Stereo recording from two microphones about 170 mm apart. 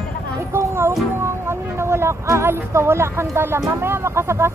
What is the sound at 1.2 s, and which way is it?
Speech, 15° right (ahead or behind).